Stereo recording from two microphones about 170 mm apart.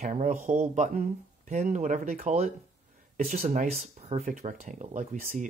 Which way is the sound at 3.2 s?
50° right (ahead or behind).